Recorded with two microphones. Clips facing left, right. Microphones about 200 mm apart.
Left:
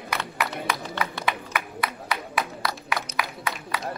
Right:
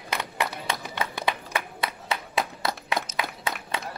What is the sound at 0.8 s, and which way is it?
Music, 15° right (ahead or behind).